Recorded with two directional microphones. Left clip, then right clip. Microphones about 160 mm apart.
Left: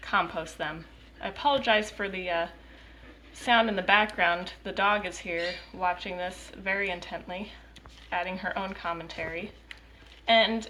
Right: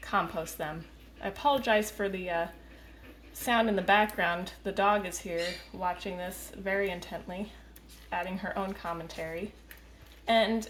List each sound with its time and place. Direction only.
0.0 s a woman's voice: 55° right (ahead or behind)